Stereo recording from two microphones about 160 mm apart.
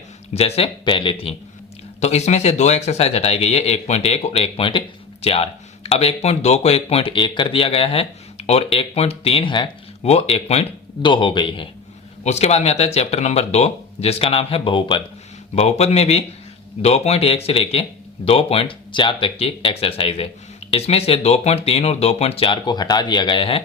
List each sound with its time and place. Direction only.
0.3 s speech: 40° left (ahead or behind)
2.0 s speech: 45° left (ahead or behind)
12.2 s speech: 40° left (ahead or behind)